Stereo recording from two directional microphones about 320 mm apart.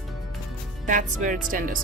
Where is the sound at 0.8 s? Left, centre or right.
Right.